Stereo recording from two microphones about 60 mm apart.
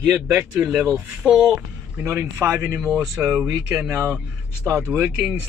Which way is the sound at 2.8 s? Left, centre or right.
Centre.